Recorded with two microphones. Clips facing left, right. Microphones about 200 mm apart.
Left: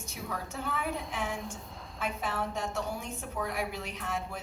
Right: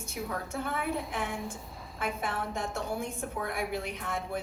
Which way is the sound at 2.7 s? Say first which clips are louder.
Right 2 dB; 55° right (ahead or behind).